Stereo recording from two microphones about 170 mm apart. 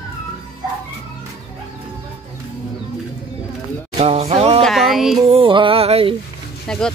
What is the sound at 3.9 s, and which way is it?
Music, 35° right (ahead or behind).